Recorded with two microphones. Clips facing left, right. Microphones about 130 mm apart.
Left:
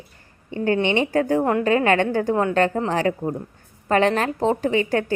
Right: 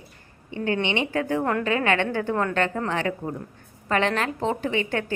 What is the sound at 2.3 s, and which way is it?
Speech, 25° left (ahead or behind).